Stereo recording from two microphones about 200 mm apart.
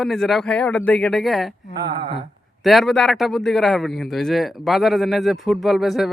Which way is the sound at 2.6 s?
Centre (ahead or behind).